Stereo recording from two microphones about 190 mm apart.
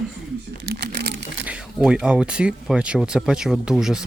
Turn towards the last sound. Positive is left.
turn(degrees=-5)  # may be behind; listen again after turning